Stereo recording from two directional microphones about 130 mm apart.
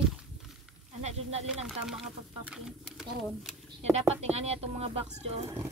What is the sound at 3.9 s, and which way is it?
Speech, 55° right (ahead or behind).